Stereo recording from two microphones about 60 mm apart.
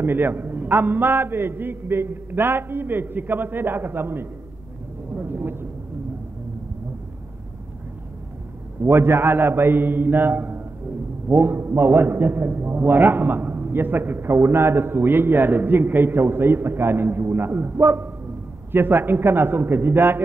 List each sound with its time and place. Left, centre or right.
0.0 s a man's voice: right
8.8 s a man's voice: right